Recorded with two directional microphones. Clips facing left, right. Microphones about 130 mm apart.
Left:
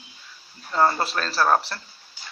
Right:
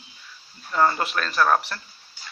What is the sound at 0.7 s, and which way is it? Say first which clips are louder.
Speech: even; 30° left (ahead or behind).